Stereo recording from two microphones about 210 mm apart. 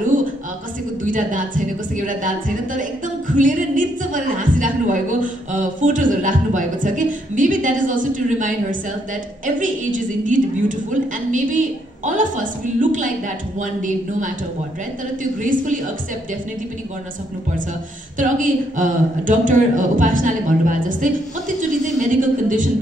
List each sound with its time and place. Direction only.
0.0 s a sound: 40° right (ahead or behind)
1.0 s a woman's voice: 40° right (ahead or behind)
15.4 s a woman's voice: 40° right (ahead or behind)
18.1 s a woman's voice: 40° right (ahead or behind)
22.2 s a woman's voice: 40° right (ahead or behind)